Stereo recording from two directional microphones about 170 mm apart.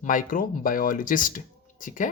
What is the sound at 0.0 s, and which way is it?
Speech, 50° left (ahead or behind).